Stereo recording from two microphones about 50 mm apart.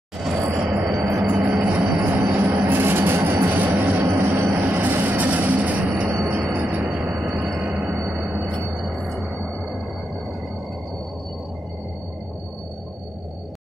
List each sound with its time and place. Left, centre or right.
0.2 s vehicle: centre
1.0 s jingle bell: right
2.6 s vehicle: right
3.6 s vehicle: right
4.2 s train: right
6.3 s music: right
8.0 s a sound: right
8.8 s vehicle: centre